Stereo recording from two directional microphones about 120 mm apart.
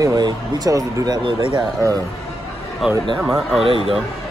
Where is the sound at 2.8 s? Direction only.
5° right (ahead or behind).